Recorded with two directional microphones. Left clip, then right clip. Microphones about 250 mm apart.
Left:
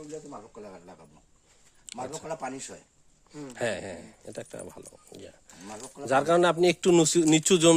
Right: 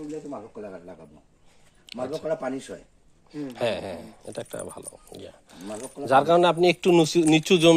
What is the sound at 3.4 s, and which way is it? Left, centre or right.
Speech, left.